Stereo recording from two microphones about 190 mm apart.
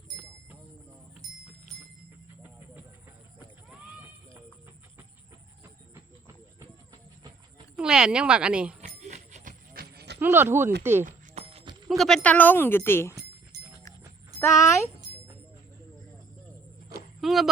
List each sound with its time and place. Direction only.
6.6 s a sound: 20° right (ahead or behind)
7.8 s speech: 5° right (ahead or behind)
8.8 s a sound: 40° right (ahead or behind); by 10.2 s 55° right (ahead or behind)
10.2 s speech: 10° right (ahead or behind)
11.0 s a sound: 35° right (ahead or behind)
11.9 s a woman's voice: centre (ahead or behind)
13.5 s clip-clop: 20° right (ahead or behind)
14.3 s a woman's voice: 15° left (ahead or behind)
17.2 s speech: centre (ahead or behind)